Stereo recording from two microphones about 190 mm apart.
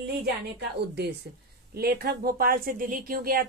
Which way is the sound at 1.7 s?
55° right (ahead or behind).